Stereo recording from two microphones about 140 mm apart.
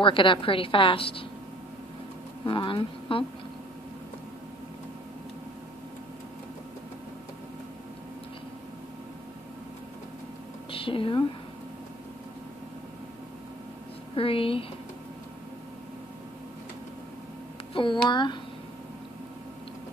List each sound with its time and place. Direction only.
0.0 s a woman's voice: 35° left (ahead or behind)
2.4 s a woman's voice: 35° left (ahead or behind)
10.7 s speech: 40° left (ahead or behind)
14.1 s a woman's voice: 40° left (ahead or behind)
17.7 s a woman's voice: 35° left (ahead or behind)